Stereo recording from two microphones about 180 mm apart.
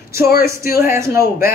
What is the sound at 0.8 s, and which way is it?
Speech, 15° right (ahead or behind).